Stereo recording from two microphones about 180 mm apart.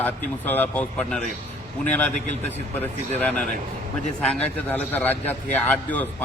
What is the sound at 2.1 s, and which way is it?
Speech, 40° left (ahead or behind).